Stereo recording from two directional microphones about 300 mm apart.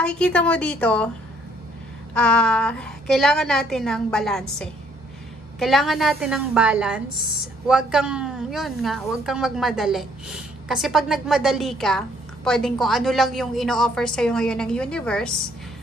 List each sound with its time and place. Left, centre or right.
0.0 s a woman's voice: centre
2.1 s a woman's voice: centre